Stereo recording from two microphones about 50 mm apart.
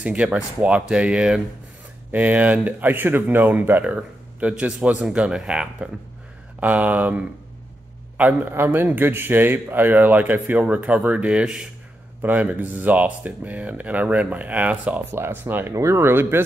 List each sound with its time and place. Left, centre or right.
0.2 s speech: right
2.1 s a man's voice: right
3.8 s speech: right
6.6 s a man's voice: right
8.5 s a man's voice: right
15.0 s speech: right
15.7 s speech: right